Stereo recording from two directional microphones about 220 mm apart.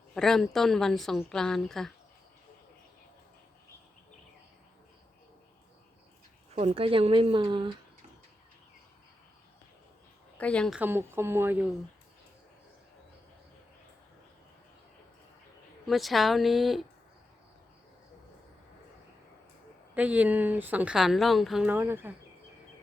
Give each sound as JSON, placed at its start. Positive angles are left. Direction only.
{"t": 0.1, "sound": "a woman's voice", "side_deg": 0}
{"t": 6.5, "sound": "speech", "side_deg": -25}
{"t": 10.3, "sound": "a woman's voice", "side_deg": 5}
{"t": 10.8, "sound": "a woman's voice", "side_deg": -10}
{"t": 15.9, "sound": "a woman's voice", "side_deg": 0}
{"t": 19.9, "sound": "a woman's voice", "side_deg": -5}